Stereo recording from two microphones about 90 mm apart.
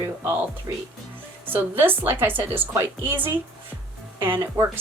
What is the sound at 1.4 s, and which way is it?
A woman's voice, 20° right (ahead or behind).